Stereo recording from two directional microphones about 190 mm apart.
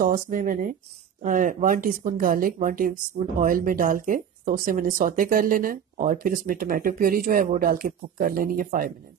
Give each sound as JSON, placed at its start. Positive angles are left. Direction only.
{"t": 0.0, "sound": "speech", "side_deg": -45}